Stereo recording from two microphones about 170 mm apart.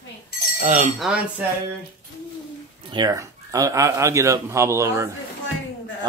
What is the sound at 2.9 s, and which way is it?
Speech, 25° right (ahead or behind).